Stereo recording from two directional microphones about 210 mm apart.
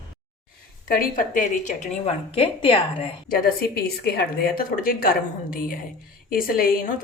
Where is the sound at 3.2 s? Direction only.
45° left (ahead or behind).